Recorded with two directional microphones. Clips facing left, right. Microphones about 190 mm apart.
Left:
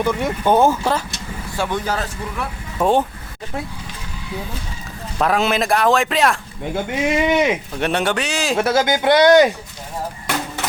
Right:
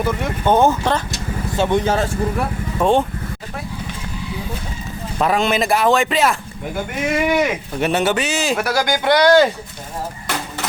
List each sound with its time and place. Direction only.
0.0 s speech: 5° right (ahead or behind)
0.4 s speech: 10° left (ahead or behind)
1.5 s speech: 20° right (ahead or behind)
2.7 s speech: 5° left (ahead or behind)
5.1 s speech: centre (ahead or behind)
7.0 s speech: 20° left (ahead or behind)
7.8 s speech: 5° right (ahead or behind)
8.5 s speech: 25° left (ahead or behind)